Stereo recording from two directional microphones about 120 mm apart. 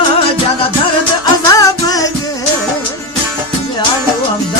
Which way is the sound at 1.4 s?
30° left (ahead or behind).